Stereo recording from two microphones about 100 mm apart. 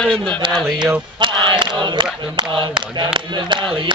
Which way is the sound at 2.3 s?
50° right (ahead or behind).